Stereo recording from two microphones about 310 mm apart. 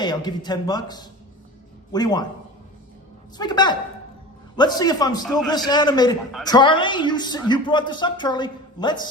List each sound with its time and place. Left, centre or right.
0.0 s a man's voice: centre
3.3 s a man's voice: centre